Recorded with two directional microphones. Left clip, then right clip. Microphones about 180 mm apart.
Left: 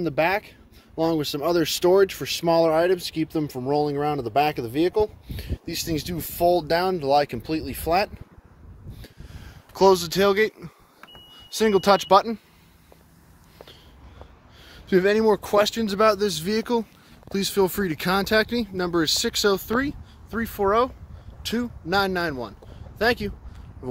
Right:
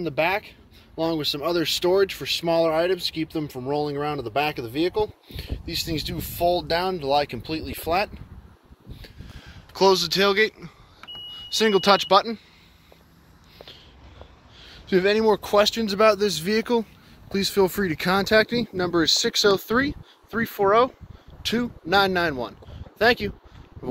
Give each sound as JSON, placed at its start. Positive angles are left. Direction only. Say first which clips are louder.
{"t": 0.0, "sound": "speech", "louder": "left 1 dB", "side_deg": 40}
{"t": 9.7, "sound": "speech", "louder": "left 1 dB", "side_deg": 30}
{"t": 14.6, "sound": "speech", "louder": "left 1 dB", "side_deg": 20}